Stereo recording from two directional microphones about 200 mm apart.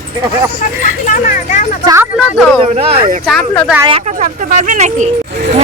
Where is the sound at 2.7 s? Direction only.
30° right (ahead or behind).